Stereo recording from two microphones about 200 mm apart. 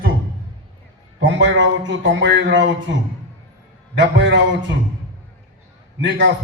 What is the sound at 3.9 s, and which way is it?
Speech, 65° right (ahead or behind).